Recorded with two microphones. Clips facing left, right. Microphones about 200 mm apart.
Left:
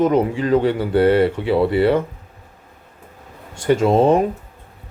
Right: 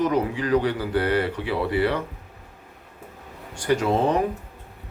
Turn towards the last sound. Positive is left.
turn(degrees=25)  # may be behind; listen again after turning